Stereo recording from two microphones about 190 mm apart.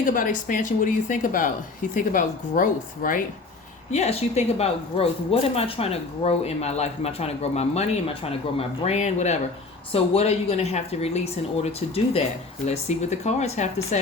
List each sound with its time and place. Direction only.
0.0 s speech: 45° left (ahead or behind)
3.9 s speech: 35° left (ahead or behind)